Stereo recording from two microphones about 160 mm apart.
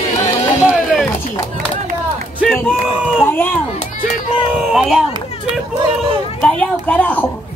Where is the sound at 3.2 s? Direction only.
10° left (ahead or behind).